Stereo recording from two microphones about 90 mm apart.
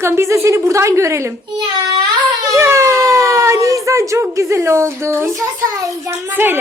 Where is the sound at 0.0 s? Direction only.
30° right (ahead or behind).